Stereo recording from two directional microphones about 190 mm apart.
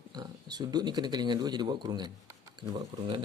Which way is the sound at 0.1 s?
20° right (ahead or behind).